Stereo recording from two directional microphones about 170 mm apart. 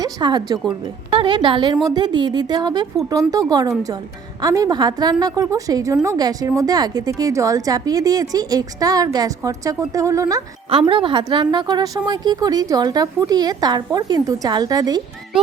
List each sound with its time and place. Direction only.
0.0 s a woman's voice: 25° right (ahead or behind)
10.7 s a woman's voice: 30° right (ahead or behind)